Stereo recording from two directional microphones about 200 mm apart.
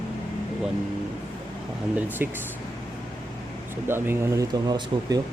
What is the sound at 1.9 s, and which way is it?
Speech, 10° right (ahead or behind).